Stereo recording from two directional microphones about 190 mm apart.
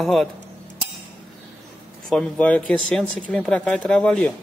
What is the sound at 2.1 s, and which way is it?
A man's voice, 5° left (ahead or behind).